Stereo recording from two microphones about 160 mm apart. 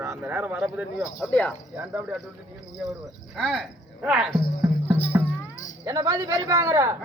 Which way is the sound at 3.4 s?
Centre (ahead or behind).